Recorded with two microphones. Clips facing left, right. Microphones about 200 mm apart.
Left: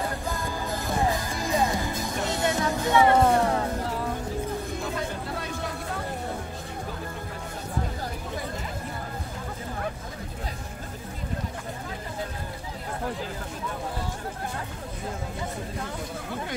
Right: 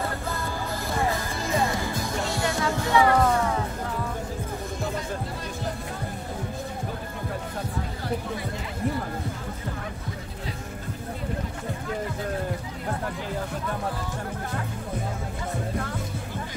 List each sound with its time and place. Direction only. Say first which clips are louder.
0.8 s music: left 1 dB; 15° left (ahead or behind); by 3.5 s 30° left (ahead or behind)